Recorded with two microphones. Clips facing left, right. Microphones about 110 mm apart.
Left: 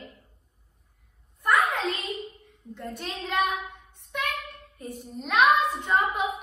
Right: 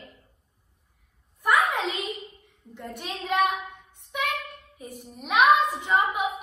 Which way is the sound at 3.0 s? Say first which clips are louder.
Right 3 dB; 5° right (ahead or behind).